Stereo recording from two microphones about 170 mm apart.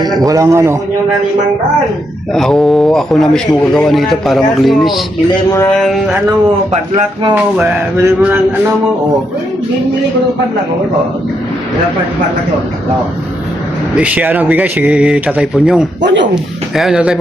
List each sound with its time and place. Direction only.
0.2 s a man's voice: 20° right (ahead or behind)
2.3 s a man's voice: centre (ahead or behind)
6.7 s speech: 30° right (ahead or behind)
7.5 s speech: 10° right (ahead or behind)
13.9 s speech: 10° right (ahead or behind)
16.0 s speech: 90° right
16.3 s a man's voice: centre (ahead or behind)